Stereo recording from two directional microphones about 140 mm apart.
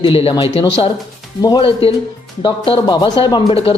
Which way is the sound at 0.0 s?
40° left (ahead or behind).